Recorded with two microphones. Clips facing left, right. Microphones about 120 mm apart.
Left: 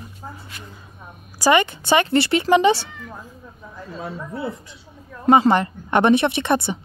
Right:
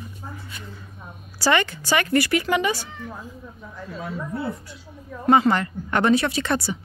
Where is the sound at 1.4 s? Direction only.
20° left (ahead or behind).